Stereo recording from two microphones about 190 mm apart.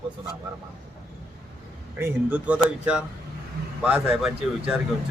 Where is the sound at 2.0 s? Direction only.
10° right (ahead or behind).